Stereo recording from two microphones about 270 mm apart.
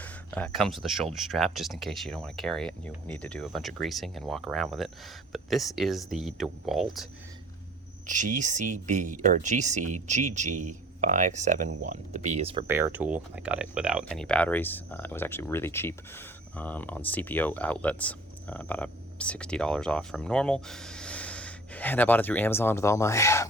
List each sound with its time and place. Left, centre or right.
0.0 s speech: centre
8.0 s speech: right
12.6 s speech: centre